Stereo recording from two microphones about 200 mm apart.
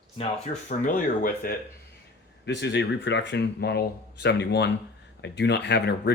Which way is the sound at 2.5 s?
60° left (ahead or behind).